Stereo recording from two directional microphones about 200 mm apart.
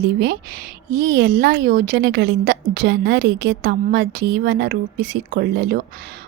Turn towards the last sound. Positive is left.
turn(degrees=-55)  # may be behind; listen again after turning